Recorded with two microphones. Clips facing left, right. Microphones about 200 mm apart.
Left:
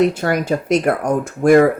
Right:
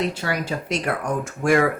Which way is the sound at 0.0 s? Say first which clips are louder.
Left 9 dB; 50° left (ahead or behind).